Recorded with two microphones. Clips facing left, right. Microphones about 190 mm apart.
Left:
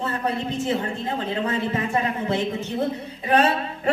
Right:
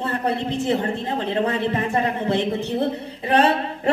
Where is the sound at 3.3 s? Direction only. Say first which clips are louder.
Right 2 dB; 30° right (ahead or behind).